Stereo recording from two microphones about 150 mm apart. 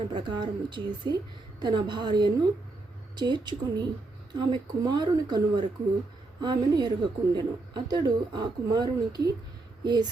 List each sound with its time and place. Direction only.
0.1 s speech: 30° right (ahead or behind)